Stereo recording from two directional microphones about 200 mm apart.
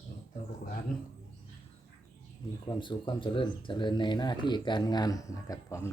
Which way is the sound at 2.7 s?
25° left (ahead or behind).